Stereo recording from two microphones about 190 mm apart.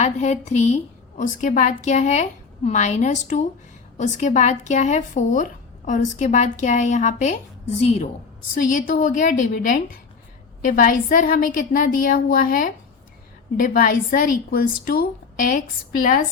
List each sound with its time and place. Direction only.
0.0 s speech: 35° left (ahead or behind)
8.5 s a woman's voice: 45° left (ahead or behind)